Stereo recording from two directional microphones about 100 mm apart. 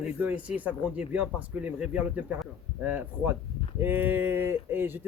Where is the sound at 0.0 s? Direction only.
15° right (ahead or behind).